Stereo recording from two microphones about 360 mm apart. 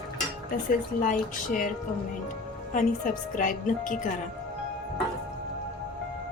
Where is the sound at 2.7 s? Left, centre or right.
Left.